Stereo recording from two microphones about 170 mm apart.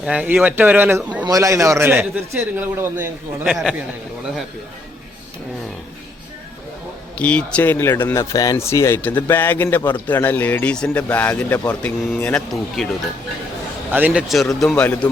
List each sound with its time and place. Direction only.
0.0 s speech: 5° right (ahead or behind)
3.4 s a man's voice: 5° right (ahead or behind)
7.2 s speech: 5° left (ahead or behind)
13.9 s a man's voice: 10° right (ahead or behind); by 15.1 s 5° left (ahead or behind)